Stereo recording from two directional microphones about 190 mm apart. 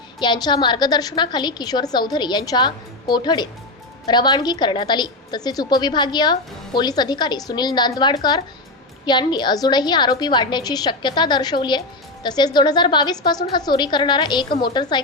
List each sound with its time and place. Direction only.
0.2 s a woman's voice: 25° left (ahead or behind)